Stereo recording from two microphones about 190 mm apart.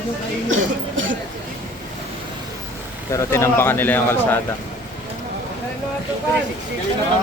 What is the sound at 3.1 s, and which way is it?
Speech, 15° left (ahead or behind).